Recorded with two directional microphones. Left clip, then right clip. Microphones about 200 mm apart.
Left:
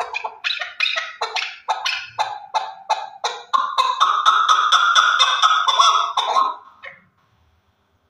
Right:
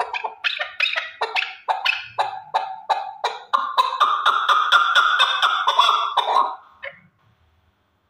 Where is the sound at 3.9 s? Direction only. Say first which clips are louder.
Left 5 dB; 30° right (ahead or behind).